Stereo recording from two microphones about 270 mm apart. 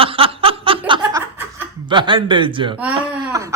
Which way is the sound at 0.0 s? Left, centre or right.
Centre.